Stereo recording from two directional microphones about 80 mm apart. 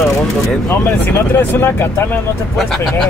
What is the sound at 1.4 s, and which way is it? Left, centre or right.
Speech, left.